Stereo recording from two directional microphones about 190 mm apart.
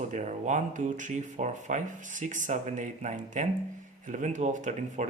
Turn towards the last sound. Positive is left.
turn(degrees=-40)  # may be behind; listen again after turning